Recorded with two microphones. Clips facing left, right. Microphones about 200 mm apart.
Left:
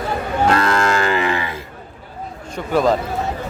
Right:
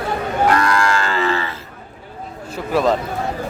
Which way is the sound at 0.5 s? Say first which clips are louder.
Left 1 dB; 25° left (ahead or behind).